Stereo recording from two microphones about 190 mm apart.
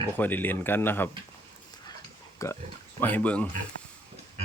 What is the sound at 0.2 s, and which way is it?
Speech, 10° left (ahead or behind).